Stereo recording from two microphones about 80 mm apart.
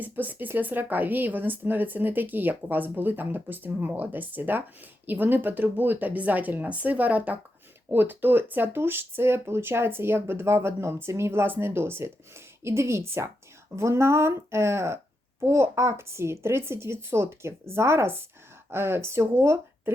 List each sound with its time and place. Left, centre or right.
0.0 s speech: right